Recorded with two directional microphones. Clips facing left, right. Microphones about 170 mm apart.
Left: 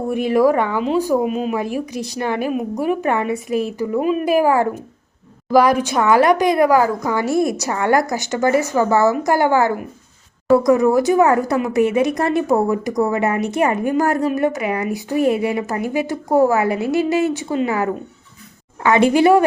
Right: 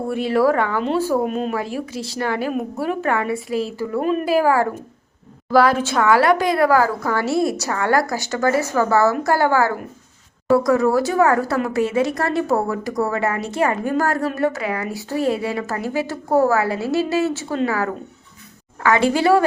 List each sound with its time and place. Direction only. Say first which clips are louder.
0.1 s a woman's voice: left 2 dB; 15° left (ahead or behind)
1.2 s a woman's voice: left 2 dB; 5° left (ahead or behind)
1.5 s a woman's voice: left 3 dB; 15° left (ahead or behind)